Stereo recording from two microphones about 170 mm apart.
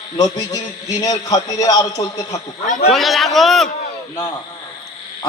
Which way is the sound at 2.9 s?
Centre (ahead or behind).